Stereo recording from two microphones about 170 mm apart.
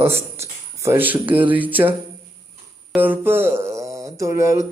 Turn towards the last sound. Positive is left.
turn(degrees=-15)  # may be behind; listen again after turning